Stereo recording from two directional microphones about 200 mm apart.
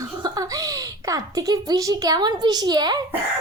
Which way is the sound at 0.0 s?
20° right (ahead or behind).